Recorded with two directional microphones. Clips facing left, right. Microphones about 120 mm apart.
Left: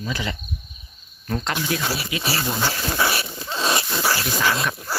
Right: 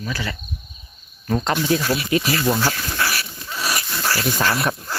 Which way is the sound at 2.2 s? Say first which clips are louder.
Right 4 dB; 30° left (ahead or behind).